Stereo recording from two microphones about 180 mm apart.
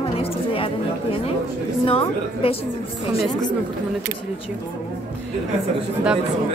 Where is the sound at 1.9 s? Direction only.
30° left (ahead or behind).